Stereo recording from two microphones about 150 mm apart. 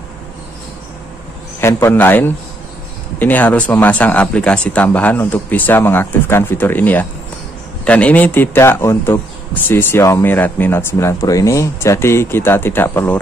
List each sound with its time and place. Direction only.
1.6 s a man's voice: 20° left (ahead or behind)